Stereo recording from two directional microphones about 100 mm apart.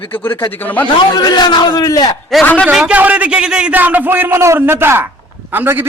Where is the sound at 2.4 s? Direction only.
15° left (ahead or behind).